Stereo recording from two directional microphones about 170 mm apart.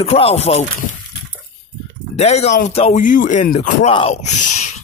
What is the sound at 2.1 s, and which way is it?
Speech, 40° left (ahead or behind).